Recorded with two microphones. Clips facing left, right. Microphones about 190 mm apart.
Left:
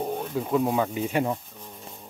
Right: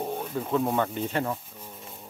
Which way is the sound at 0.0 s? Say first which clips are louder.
Left 2 dB; centre (ahead or behind).